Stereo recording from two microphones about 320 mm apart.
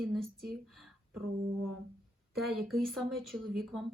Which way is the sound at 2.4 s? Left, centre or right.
Centre.